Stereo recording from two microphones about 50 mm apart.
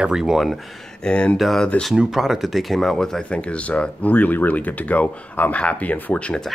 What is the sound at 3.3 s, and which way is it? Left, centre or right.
Speech, left.